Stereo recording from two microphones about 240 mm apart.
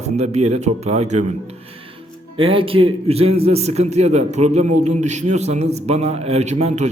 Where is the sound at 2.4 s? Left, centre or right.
Right.